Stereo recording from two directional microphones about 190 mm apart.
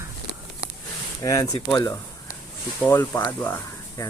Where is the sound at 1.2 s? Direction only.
15° left (ahead or behind).